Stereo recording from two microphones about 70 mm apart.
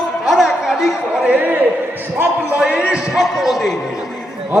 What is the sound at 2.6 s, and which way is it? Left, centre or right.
Speech, centre.